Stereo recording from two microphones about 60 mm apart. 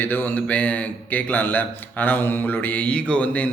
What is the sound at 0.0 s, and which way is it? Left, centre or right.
A man's voice, left.